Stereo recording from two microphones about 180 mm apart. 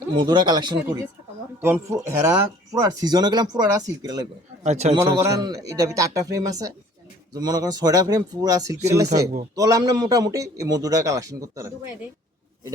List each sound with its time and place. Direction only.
0.2 s speech: 25° right (ahead or behind)
4.6 s a man's voice: 40° right (ahead or behind)
4.9 s speech: 15° right (ahead or behind)